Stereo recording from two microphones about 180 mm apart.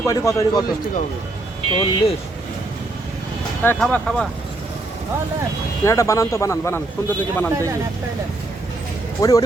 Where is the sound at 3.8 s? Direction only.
5° left (ahead or behind).